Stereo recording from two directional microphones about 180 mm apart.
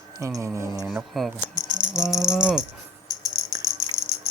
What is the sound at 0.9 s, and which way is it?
Rattle, centre (ahead or behind).